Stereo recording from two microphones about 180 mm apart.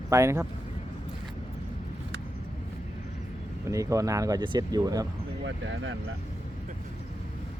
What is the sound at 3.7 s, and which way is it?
Speech, 20° right (ahead or behind).